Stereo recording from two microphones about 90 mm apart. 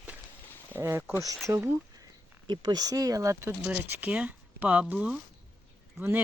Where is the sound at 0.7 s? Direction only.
25° right (ahead or behind).